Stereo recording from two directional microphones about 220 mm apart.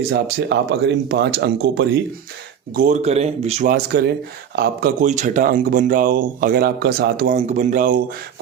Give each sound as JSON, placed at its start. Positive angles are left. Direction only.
{"t": 0.1, "sound": "speech", "side_deg": -50}
{"t": 2.7, "sound": "speech", "side_deg": -35}
{"t": 3.7, "sound": "speech", "side_deg": -45}
{"t": 7.3, "sound": "speech", "side_deg": -30}